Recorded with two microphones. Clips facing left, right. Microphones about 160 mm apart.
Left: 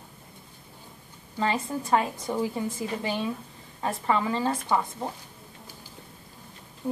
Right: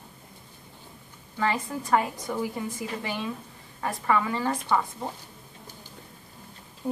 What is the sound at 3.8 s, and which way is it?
Speech, 25° left (ahead or behind).